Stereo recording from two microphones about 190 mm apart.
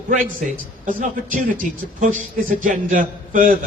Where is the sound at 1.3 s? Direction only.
45° right (ahead or behind).